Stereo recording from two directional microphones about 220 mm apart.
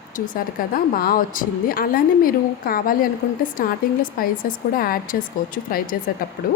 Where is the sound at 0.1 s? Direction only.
35° left (ahead or behind).